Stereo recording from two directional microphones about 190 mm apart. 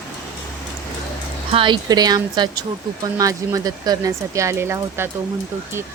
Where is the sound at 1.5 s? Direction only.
25° right (ahead or behind).